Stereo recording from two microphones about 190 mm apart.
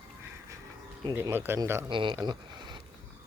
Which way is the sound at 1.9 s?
25° right (ahead or behind).